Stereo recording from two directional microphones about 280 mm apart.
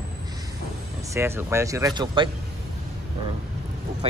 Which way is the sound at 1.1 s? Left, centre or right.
Centre.